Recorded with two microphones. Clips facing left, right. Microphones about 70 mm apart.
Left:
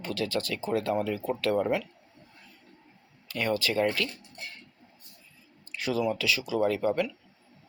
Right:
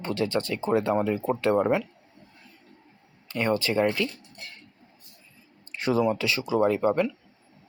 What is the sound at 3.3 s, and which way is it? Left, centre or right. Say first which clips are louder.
Speech: right 3 dB; right.